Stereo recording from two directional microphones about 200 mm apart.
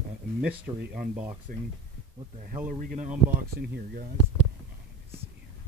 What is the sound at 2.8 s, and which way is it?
Speech, 45° right (ahead or behind).